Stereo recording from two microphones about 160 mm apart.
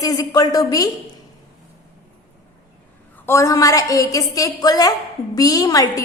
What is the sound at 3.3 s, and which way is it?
A woman's voice, 20° left (ahead or behind).